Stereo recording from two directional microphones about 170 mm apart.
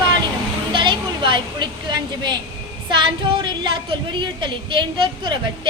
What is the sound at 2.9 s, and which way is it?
A woman's voice, 30° right (ahead or behind).